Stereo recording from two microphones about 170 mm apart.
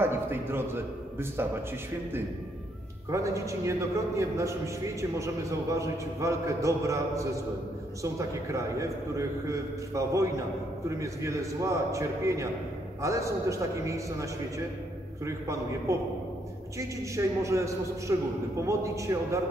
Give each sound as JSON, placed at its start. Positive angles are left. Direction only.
{"t": 0.0, "sound": "a man's voice", "side_deg": -15}
{"t": 3.1, "sound": "a man's voice", "side_deg": -20}